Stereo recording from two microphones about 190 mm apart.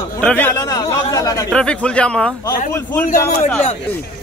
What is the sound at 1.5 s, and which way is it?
Speech, 5° left (ahead or behind).